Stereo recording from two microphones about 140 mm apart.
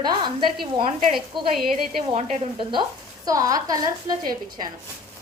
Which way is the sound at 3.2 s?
25° right (ahead or behind).